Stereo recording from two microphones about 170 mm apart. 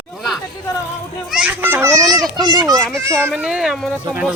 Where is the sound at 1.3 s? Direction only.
5° right (ahead or behind).